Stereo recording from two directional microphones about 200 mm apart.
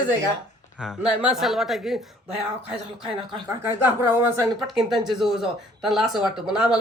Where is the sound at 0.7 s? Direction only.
5° right (ahead or behind).